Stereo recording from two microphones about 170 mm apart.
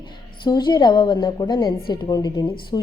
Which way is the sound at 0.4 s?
25° left (ahead or behind).